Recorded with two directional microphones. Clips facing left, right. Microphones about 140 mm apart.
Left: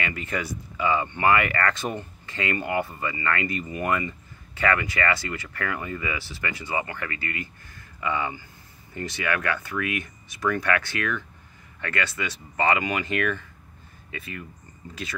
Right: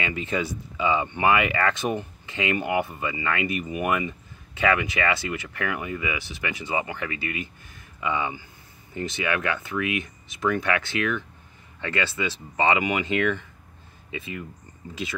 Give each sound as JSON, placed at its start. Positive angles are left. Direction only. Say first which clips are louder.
{"t": 0.0, "sound": "speech", "louder": "right 3 dB", "side_deg": -20}